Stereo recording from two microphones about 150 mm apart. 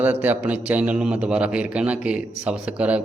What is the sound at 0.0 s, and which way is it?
A man's voice, 10° right (ahead or behind).